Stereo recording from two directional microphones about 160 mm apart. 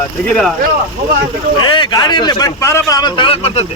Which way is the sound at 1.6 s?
30° left (ahead or behind).